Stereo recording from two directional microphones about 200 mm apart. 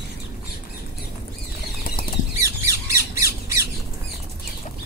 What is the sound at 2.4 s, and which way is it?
Squawk, 15° right (ahead or behind).